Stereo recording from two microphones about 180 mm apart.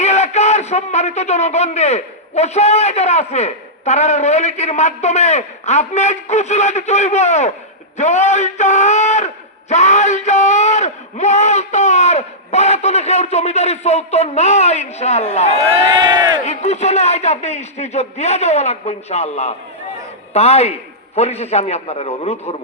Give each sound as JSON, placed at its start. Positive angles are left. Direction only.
{"t": 0.0, "sound": "speech", "side_deg": 35}
{"t": 15.5, "sound": "crowd", "side_deg": -30}
{"t": 16.4, "sound": "speech", "side_deg": 40}